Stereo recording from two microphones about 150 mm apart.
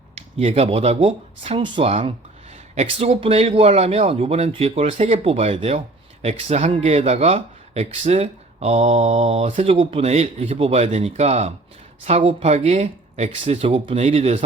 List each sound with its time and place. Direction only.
0.2 s speech: 45° right (ahead or behind)